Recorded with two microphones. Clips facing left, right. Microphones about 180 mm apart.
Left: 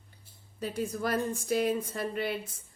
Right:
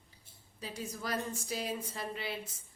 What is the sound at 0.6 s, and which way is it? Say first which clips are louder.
A woman's voice: left 9 dB; 55° left (ahead or behind).